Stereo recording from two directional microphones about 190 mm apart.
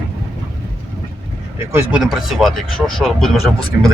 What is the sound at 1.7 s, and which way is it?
Speech, 5° right (ahead or behind).